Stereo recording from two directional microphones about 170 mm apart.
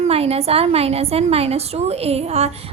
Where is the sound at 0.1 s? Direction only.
35° right (ahead or behind).